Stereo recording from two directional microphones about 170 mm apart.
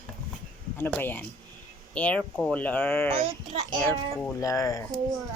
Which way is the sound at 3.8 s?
10° left (ahead or behind).